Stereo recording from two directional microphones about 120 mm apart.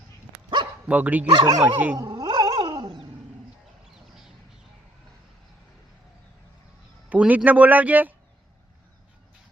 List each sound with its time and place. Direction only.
0.9 s a man's voice: 15° right (ahead or behind)
1.3 s speech: 40° right (ahead or behind)
1.6 s a man's voice: 15° right (ahead or behind)
2.0 s dog: 30° right (ahead or behind)
7.1 s a man's voice: 10° right (ahead or behind)